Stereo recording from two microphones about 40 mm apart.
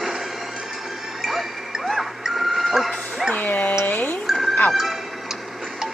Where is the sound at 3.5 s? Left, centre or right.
Left.